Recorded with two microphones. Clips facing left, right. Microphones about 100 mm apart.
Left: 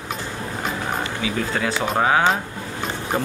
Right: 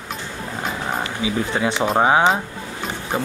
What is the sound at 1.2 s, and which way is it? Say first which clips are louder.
Speech: right 3 dB; 20° right (ahead or behind).